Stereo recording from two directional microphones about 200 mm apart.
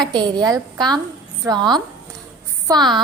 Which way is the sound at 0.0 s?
20° right (ahead or behind).